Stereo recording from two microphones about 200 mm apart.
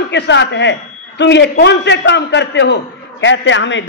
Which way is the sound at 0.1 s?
60° left (ahead or behind).